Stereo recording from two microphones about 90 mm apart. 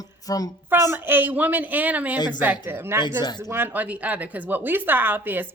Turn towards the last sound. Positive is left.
turn(degrees=-20)  # may be behind; listen again after turning